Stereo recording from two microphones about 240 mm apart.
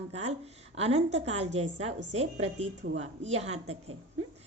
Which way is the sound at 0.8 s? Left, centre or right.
Right.